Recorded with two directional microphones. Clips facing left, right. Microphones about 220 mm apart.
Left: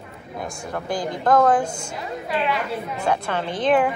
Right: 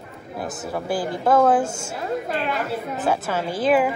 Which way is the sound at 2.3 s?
45° right (ahead or behind).